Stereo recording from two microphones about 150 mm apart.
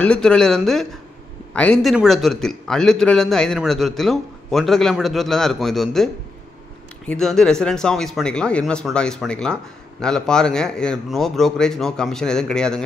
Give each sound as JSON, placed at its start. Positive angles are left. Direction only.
{"t": 0.0, "sound": "speech", "side_deg": 5}
{"t": 7.1, "sound": "speech", "side_deg": 5}